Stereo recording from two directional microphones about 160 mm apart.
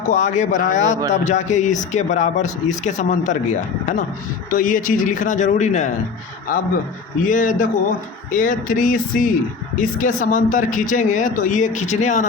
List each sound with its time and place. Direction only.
0.1 s speech: 50° left (ahead or behind)
7.3 s speech: 55° left (ahead or behind)